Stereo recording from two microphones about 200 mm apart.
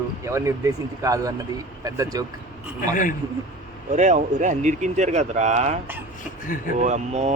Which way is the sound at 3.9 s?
35° right (ahead or behind).